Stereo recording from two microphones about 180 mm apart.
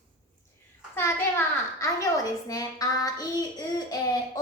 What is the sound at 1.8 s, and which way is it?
A child's voice, 20° left (ahead or behind).